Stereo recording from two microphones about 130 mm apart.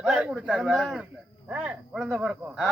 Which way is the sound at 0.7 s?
Centre (ahead or behind).